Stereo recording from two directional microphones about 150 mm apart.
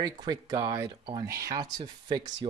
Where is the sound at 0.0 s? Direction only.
25° right (ahead or behind).